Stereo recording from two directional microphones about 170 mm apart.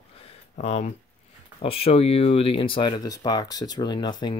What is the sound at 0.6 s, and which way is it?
Speech, 40° left (ahead or behind).